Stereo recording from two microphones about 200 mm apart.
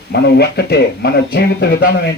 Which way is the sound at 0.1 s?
55° left (ahead or behind).